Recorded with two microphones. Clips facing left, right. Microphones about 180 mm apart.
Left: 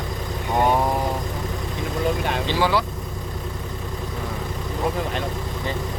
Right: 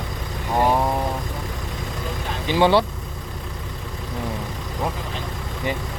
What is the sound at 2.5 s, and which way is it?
Speech, 25° right (ahead or behind).